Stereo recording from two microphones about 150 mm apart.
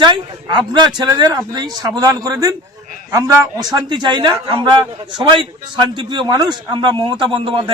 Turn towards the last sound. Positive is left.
turn(degrees=-35)  # may be behind; listen again after turning